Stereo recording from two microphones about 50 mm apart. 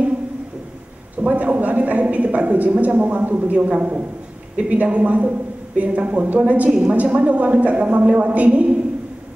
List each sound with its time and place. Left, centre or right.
1.2 s a woman's voice: right